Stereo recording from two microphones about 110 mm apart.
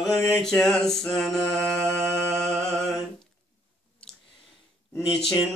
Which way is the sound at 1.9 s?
10° left (ahead or behind).